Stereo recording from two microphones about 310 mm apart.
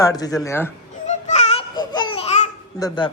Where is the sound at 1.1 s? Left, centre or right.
Left.